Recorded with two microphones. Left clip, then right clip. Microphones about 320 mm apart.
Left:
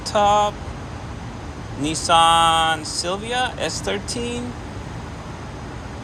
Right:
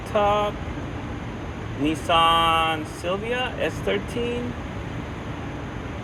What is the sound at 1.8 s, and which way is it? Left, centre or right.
Speech, centre.